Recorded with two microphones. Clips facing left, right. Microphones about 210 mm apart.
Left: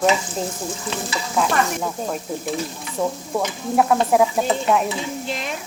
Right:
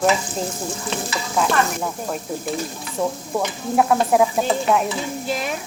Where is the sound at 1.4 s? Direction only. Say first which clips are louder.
Even; centre (ahead or behind).